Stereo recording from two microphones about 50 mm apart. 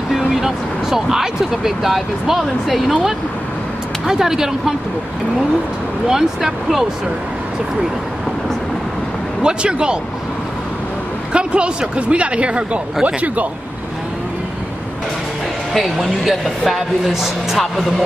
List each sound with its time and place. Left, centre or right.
0.1 s speech: centre
6.0 s speech: centre
9.4 s speech: centre
11.3 s a woman's voice: right
15.7 s speech: centre